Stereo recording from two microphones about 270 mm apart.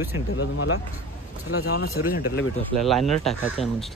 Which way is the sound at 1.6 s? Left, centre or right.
Left.